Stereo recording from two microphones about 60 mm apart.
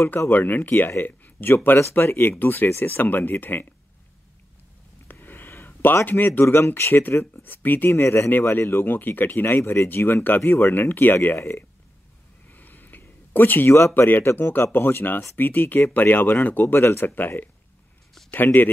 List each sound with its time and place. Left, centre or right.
0.3 s speech: left
5.0 s a sound: left
6.0 s speech: left
6.4 s speech: left
7.9 s speech: left
8.3 s speech: left
9.6 s speech: left
9.8 s speech: left
10.7 s speech: left
11.3 s speech: left
12.4 s a sound: left
13.7 s speech: left
16.6 s speech: left
18.3 s speech: left